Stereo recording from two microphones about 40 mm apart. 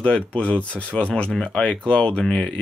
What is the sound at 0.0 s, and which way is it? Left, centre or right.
Speech, left.